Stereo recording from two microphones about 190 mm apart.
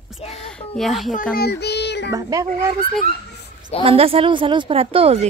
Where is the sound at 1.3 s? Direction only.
60° left (ahead or behind).